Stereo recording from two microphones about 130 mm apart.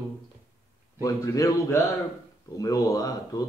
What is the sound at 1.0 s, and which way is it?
Speech, 25° left (ahead or behind).